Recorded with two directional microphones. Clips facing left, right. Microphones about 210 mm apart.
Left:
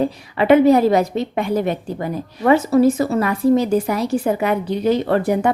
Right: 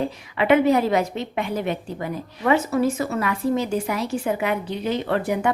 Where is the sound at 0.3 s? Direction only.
40° left (ahead or behind).